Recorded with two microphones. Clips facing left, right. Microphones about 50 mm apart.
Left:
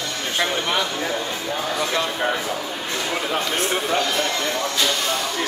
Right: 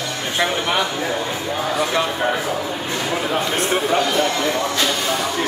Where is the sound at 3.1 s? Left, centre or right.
Centre.